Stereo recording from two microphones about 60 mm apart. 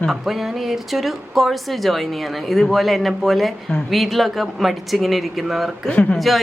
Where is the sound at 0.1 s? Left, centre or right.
Centre.